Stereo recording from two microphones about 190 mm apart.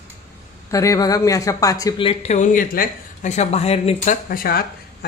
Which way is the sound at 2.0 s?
35° left (ahead or behind).